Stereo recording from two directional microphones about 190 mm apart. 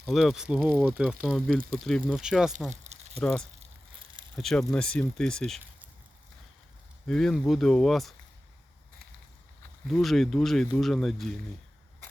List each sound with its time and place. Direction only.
0.0 s speech: centre (ahead or behind)
2.6 s a sound: 35° right (ahead or behind)
3.2 s speech: 5° left (ahead or behind)
7.1 s speech: 5° left (ahead or behind)
9.8 s speech: centre (ahead or behind)